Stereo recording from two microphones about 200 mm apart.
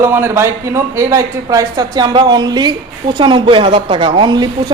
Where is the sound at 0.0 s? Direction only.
10° right (ahead or behind).